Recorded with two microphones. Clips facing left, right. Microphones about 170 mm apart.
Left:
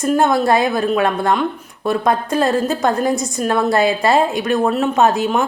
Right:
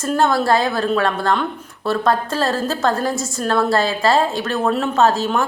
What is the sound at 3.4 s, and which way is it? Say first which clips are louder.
A woman's voice: left 1 dB; 15° left (ahead or behind).